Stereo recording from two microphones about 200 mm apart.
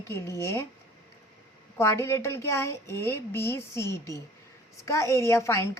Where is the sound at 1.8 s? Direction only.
15° left (ahead or behind).